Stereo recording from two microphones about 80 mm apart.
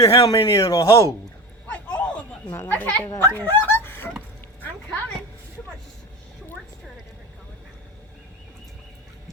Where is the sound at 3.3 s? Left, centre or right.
Left.